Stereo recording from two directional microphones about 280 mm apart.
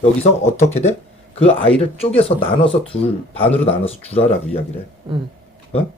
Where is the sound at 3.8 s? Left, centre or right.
Left.